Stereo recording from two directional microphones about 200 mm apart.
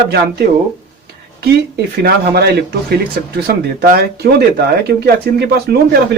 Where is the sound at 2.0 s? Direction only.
50° right (ahead or behind).